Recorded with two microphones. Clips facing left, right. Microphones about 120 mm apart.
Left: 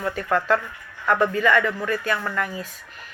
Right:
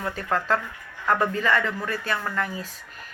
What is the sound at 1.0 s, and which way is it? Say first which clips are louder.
Speech: left 3 dB; 35° right (ahead or behind).